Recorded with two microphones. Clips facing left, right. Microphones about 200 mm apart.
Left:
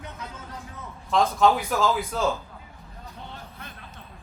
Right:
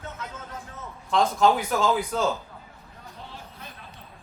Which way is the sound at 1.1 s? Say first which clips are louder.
Even; centre (ahead or behind).